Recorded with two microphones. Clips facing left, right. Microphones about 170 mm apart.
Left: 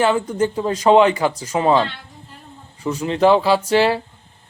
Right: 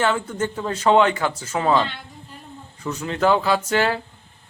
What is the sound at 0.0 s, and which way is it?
Speech, 10° left (ahead or behind).